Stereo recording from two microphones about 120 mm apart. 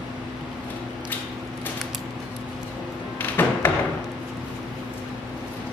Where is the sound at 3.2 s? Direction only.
15° left (ahead or behind).